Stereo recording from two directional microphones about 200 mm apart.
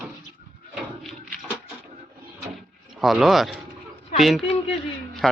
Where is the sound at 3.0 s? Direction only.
Centre (ahead or behind).